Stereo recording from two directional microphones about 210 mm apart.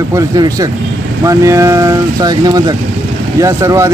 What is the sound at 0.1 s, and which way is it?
Speech, 15° right (ahead or behind).